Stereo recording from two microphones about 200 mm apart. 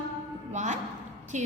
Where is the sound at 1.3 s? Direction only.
35° right (ahead or behind).